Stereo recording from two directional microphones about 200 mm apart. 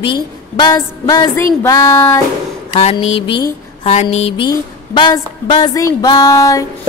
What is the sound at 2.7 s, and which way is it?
Mantra, 30° left (ahead or behind).